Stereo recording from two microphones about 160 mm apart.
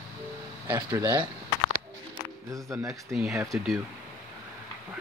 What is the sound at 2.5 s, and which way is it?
Speech, 15° right (ahead or behind).